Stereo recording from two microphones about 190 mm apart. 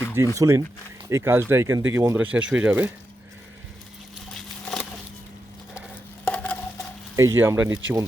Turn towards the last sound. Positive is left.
turn(degrees=-15)  # may be behind; listen again after turning